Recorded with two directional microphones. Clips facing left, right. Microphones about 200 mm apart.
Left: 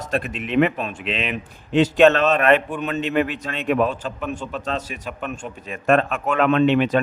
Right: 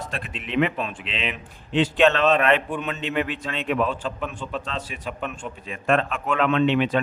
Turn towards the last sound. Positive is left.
turn(degrees=45)  # may be behind; listen again after turning